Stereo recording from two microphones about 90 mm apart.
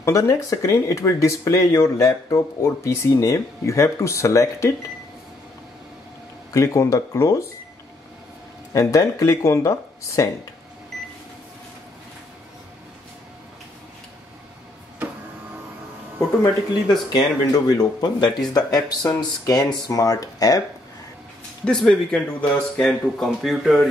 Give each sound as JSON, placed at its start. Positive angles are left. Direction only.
{"t": 0.0, "sound": "speech", "side_deg": 35}
{"t": 6.5, "sound": "speech", "side_deg": 35}
{"t": 8.7, "sound": "speech", "side_deg": 35}
{"t": 17.1, "sound": "speech", "side_deg": 55}
{"t": 21.6, "sound": "speech", "side_deg": 10}